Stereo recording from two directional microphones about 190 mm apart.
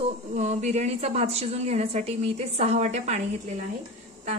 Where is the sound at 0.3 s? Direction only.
40° right (ahead or behind).